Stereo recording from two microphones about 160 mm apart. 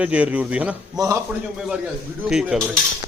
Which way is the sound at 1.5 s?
5° right (ahead or behind).